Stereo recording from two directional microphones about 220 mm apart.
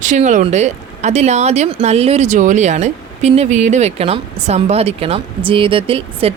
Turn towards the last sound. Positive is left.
turn(degrees=-25)  # may be behind; listen again after turning